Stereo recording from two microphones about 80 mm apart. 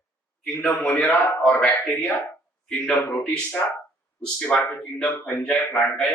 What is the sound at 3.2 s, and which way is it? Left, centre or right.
Speech, centre.